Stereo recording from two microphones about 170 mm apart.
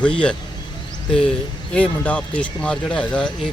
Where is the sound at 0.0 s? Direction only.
5° left (ahead or behind).